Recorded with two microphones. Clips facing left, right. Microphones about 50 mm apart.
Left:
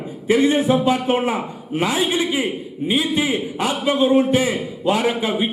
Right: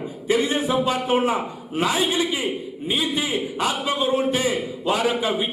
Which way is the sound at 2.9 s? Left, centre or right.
Centre.